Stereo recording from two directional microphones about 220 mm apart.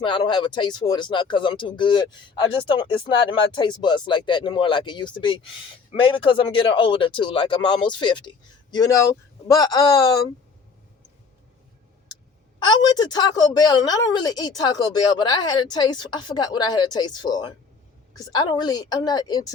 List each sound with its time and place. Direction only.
0.0 s a woman's voice: 20° left (ahead or behind)
12.6 s a woman's voice: 20° left (ahead or behind)